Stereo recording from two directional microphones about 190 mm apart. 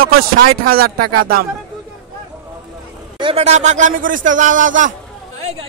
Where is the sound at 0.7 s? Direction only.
50° right (ahead or behind).